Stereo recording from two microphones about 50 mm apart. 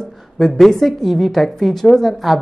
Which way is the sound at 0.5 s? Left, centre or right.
Centre.